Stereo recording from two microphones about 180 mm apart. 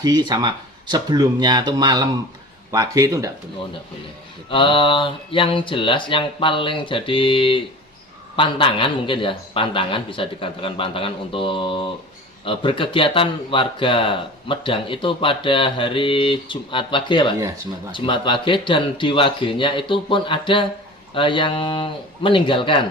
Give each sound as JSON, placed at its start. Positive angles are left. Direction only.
{"t": 0.0, "sound": "speech", "side_deg": -25}
{"t": 4.4, "sound": "speech", "side_deg": 30}